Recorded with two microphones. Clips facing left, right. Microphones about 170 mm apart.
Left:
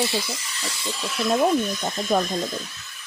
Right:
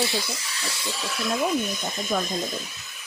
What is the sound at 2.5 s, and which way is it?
Speech, 15° right (ahead or behind).